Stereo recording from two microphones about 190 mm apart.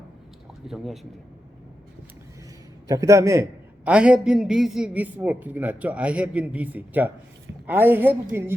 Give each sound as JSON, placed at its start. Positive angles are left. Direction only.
{"t": 0.6, "sound": "a man's voice", "side_deg": 0}
{"t": 2.8, "sound": "a man's voice", "side_deg": -15}